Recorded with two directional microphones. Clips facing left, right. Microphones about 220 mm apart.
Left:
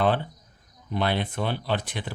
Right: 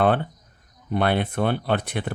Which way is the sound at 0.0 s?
55° right (ahead or behind).